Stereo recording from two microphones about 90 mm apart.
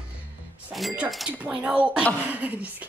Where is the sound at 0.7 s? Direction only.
Centre (ahead or behind).